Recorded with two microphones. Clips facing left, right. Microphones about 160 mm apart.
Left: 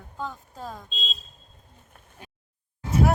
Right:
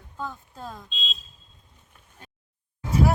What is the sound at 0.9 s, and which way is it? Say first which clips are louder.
Speech: left 1 dB; 40° left (ahead or behind).